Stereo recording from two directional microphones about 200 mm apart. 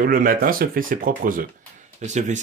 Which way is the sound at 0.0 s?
45° right (ahead or behind).